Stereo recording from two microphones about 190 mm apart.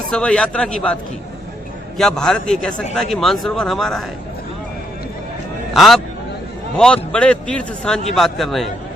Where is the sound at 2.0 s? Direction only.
Centre (ahead or behind).